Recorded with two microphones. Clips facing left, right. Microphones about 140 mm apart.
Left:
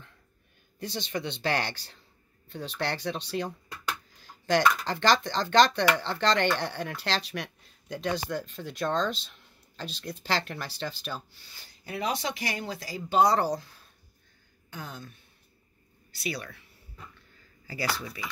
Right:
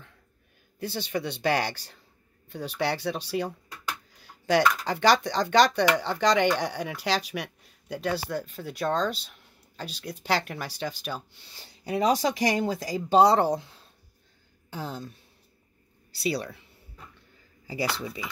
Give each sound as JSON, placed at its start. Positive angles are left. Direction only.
{"t": 0.7, "sound": "speech", "side_deg": -10}
{"t": 11.8, "sound": "speech", "side_deg": -35}
{"t": 17.6, "sound": "speech", "side_deg": -25}